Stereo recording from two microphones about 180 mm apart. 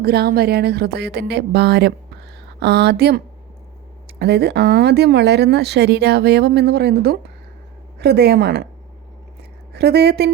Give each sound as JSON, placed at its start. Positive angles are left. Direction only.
{"t": 0.0, "sound": "speech", "side_deg": -60}
{"t": 4.2, "sound": "speech", "side_deg": -65}
{"t": 9.4, "sound": "a sound", "side_deg": -60}